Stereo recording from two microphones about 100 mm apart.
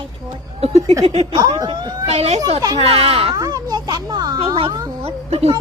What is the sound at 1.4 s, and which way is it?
Speech, 35° right (ahead or behind).